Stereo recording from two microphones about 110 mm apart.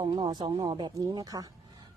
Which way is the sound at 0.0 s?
45° right (ahead or behind).